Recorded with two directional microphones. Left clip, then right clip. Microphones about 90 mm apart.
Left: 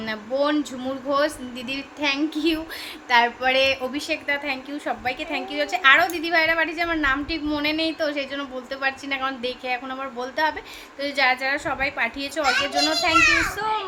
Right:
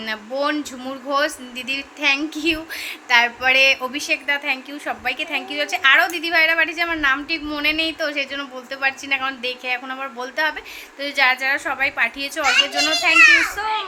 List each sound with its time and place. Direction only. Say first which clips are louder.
0.0 s a woman's voice: right 1 dB; 40° left (ahead or behind)
12.8 s a woman's voice: right 4 dB; 50° left (ahead or behind)